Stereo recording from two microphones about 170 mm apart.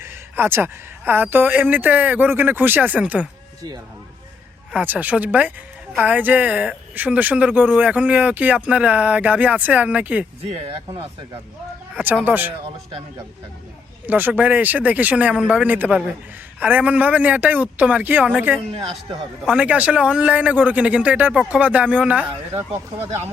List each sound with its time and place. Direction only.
0.0 s speech: 15° right (ahead or behind)
4.7 s speech: 10° right (ahead or behind)
12.2 s speech: 10° right (ahead or behind)
14.1 s speech: 10° right (ahead or behind)
22.3 s speech: 30° right (ahead or behind)